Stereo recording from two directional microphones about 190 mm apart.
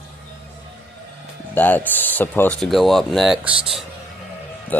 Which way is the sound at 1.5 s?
10° left (ahead or behind).